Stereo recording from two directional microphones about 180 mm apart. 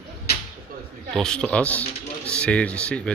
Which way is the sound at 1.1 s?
5° left (ahead or behind).